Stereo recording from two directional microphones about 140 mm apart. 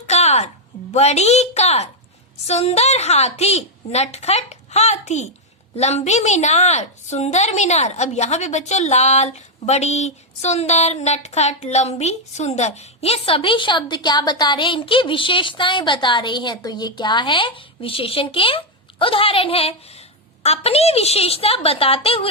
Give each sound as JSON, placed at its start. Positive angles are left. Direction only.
{"t": 0.1, "sound": "a woman's voice", "side_deg": 50}